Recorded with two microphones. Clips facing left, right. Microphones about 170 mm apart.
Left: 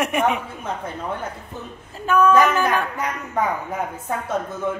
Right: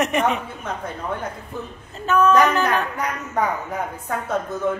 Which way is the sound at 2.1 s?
10° left (ahead or behind).